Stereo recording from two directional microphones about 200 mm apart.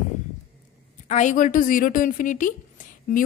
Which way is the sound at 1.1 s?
40° left (ahead or behind).